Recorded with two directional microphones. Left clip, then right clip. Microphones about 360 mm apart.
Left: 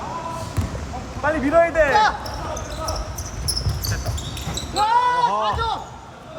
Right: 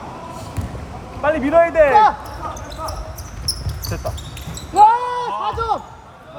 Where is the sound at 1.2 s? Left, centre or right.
Right.